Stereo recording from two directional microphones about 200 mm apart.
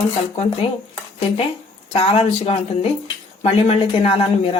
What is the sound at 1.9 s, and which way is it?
Speech, 30° left (ahead or behind).